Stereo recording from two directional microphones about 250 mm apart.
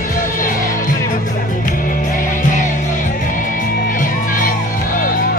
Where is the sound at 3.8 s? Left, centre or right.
Left.